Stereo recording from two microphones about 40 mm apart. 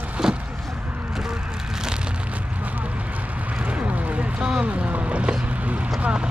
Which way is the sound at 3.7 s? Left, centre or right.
Right.